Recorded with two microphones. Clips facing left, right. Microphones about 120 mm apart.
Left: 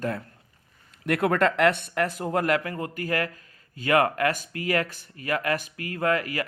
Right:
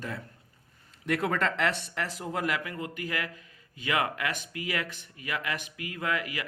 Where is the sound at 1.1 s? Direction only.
60° left (ahead or behind).